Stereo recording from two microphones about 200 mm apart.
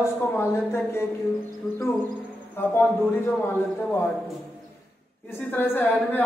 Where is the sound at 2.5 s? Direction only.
10° left (ahead or behind).